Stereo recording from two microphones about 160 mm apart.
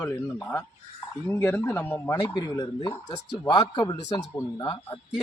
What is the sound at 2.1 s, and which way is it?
A man's voice, 25° left (ahead or behind).